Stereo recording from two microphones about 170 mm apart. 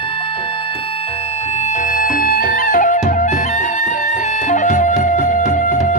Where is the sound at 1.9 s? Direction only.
55° left (ahead or behind).